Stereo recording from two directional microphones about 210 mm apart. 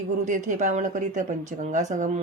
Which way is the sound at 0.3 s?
35° right (ahead or behind).